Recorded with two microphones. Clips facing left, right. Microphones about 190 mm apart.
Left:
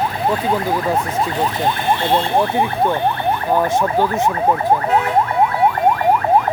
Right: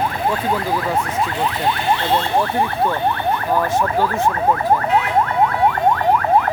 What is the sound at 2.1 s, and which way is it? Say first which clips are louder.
Speech: left 4 dB; 15° left (ahead or behind).